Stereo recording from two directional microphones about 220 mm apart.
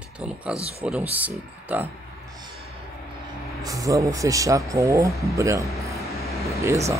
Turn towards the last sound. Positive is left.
turn(degrees=-15)  # may be behind; listen again after turning